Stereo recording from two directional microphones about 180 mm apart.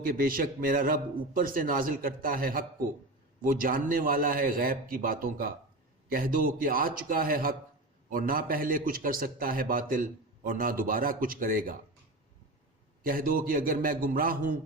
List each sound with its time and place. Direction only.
0.0 s a man's voice: 55° right (ahead or behind)
13.0 s a man's voice: 50° right (ahead or behind)